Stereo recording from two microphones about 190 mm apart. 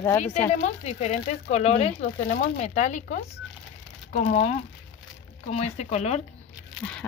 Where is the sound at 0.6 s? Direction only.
35° left (ahead or behind).